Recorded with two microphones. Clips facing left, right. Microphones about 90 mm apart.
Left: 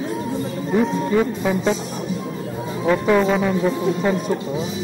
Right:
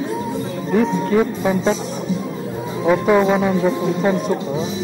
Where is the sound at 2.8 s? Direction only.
10° right (ahead or behind).